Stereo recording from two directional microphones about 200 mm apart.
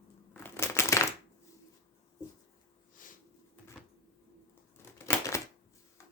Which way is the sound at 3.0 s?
40° left (ahead or behind).